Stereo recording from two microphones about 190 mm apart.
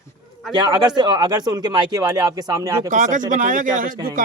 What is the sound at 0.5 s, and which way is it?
Speech, 25° right (ahead or behind).